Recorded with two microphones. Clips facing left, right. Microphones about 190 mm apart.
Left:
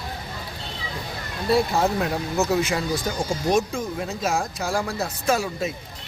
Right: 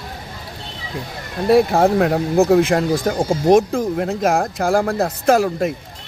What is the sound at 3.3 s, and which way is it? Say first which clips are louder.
Speech: right 9 dB; 75° right (ahead or behind).